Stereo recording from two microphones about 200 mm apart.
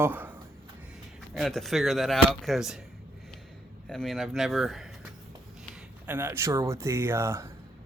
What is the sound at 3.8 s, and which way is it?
Speech, centre (ahead or behind).